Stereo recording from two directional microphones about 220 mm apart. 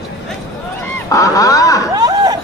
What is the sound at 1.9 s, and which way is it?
Chatter, 15° right (ahead or behind).